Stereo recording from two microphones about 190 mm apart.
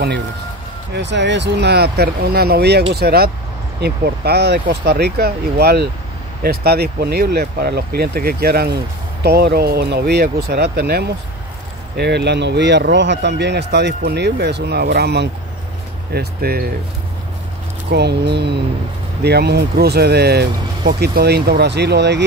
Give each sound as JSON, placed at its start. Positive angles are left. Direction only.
{"t": 0.9, "sound": "speech", "side_deg": -65}
{"t": 17.8, "sound": "speech", "side_deg": -60}